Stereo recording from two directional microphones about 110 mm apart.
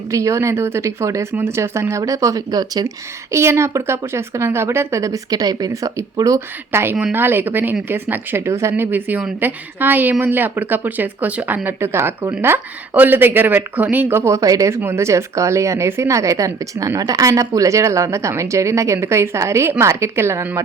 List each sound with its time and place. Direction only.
0.1 s a woman's voice: 30° right (ahead or behind)
3.3 s a woman's voice: 25° right (ahead or behind)
6.7 s a woman's voice: 20° right (ahead or behind)